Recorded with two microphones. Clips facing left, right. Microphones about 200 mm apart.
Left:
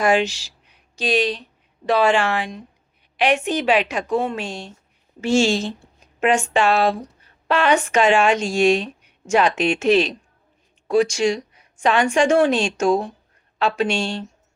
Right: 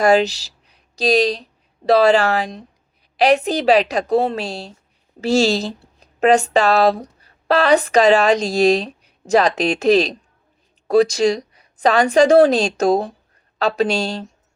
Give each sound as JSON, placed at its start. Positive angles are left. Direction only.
{"t": 0.0, "sound": "a woman's voice", "side_deg": -40}